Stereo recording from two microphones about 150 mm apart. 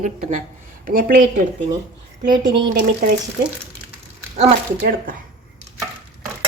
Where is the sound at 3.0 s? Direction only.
65° right (ahead or behind).